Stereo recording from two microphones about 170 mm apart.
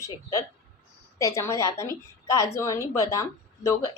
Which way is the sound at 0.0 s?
20° left (ahead or behind).